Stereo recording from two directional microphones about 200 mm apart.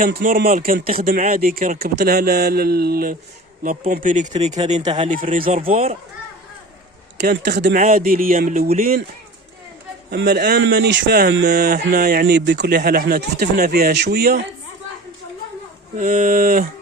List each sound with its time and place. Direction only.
0.0 s speech: 45° right (ahead or behind)
7.2 s speech: 55° right (ahead or behind)
10.1 s speech: 55° right (ahead or behind)
16.0 s speech: 40° right (ahead or behind)